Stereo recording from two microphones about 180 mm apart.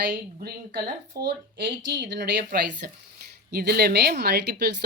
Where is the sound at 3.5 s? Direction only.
60° right (ahead or behind).